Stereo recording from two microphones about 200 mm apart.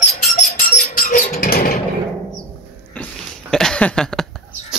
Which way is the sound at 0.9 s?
45° left (ahead or behind).